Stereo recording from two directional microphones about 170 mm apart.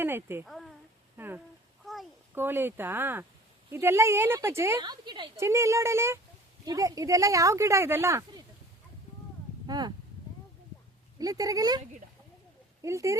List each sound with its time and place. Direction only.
0.0 s speech: 15° right (ahead or behind)
0.4 s a woman's voice: centre (ahead or behind)
1.1 s speech: 10° right (ahead or behind)
1.8 s a sound: centre (ahead or behind)
2.3 s a woman's voice: 15° right (ahead or behind)
5.4 s a woman's voice: 15° right (ahead or behind)
9.6 s speech: 25° right (ahead or behind)
11.2 s speech: 20° right (ahead or behind)
12.8 s speech: 20° right (ahead or behind)